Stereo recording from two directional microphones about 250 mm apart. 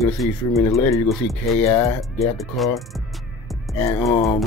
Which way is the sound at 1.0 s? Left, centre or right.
Centre.